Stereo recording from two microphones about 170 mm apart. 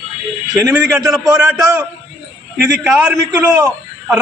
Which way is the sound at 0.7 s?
10° right (ahead or behind).